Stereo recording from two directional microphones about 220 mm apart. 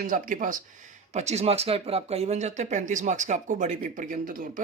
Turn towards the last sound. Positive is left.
turn(degrees=-40)  # may be behind; listen again after turning